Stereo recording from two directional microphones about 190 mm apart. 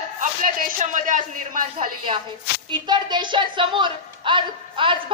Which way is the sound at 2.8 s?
25° right (ahead or behind).